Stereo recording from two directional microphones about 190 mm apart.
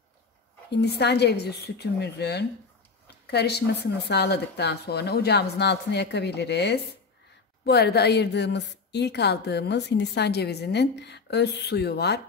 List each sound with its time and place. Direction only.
0.7 s a woman's voice: 60° left (ahead or behind)